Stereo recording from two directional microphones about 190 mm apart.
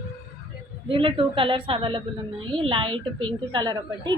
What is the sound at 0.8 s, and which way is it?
A woman's voice, 30° right (ahead or behind).